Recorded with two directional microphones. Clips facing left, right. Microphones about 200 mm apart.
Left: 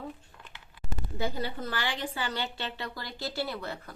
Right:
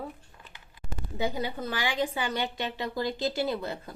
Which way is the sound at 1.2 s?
15° right (ahead or behind).